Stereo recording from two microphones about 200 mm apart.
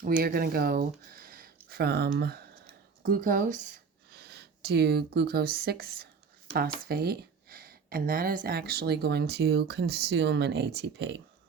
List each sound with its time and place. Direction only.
0.2 s speech: 50° right (ahead or behind)